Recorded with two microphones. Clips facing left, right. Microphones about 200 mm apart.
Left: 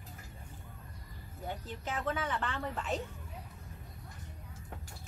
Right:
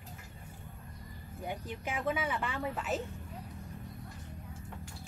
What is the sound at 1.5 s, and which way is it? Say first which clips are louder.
Speech: right 1 dB; 10° right (ahead or behind).